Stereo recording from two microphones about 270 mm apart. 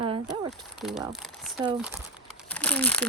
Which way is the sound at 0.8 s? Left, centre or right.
Centre.